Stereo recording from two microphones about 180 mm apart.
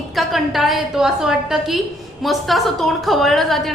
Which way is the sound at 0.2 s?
Centre (ahead or behind).